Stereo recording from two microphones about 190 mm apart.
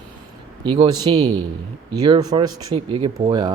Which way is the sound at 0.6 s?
25° right (ahead or behind).